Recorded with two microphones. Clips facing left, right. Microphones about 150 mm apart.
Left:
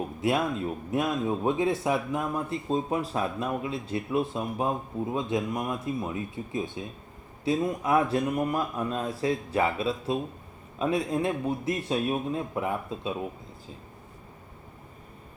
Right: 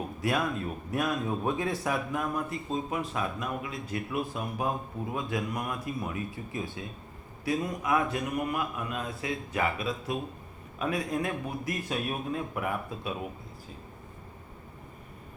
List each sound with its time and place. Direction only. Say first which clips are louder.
0.2 s a man's voice: left 3 dB; 20° left (ahead or behind)